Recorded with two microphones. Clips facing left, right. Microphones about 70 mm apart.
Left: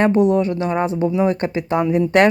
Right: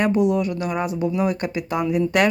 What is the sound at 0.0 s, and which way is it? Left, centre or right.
Speech, left.